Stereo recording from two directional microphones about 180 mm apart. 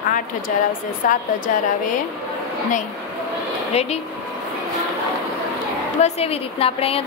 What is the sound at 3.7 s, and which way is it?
Speech, 35° left (ahead or behind).